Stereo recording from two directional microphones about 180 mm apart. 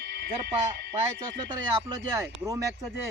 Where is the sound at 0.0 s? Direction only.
65° right (ahead or behind).